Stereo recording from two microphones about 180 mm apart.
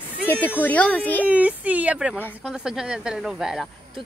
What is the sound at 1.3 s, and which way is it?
Speech, 10° right (ahead or behind).